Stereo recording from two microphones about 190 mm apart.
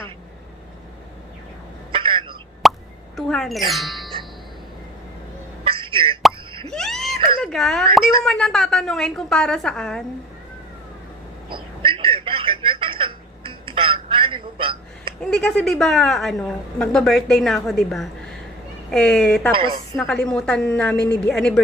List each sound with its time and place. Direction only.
1.9 s telephone: 30° right (ahead or behind)
2.6 s plop: centre (ahead or behind)
3.2 s a woman's voice: centre (ahead or behind)
5.6 s plop: 25° right (ahead or behind)
6.7 s whimper: centre (ahead or behind)
7.4 s a woman's voice: centre (ahead or behind)
11.4 s telephone: 25° right (ahead or behind)
15.2 s a woman's voice: 5° left (ahead or behind)